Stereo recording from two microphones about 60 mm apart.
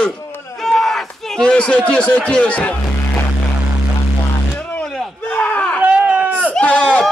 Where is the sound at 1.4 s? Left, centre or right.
Centre.